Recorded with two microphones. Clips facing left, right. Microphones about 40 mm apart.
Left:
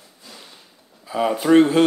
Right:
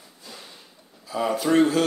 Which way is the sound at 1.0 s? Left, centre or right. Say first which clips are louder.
Left 3 dB; left.